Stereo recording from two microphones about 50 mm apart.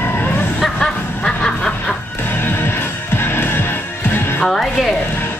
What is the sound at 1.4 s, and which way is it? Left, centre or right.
Snicker, centre.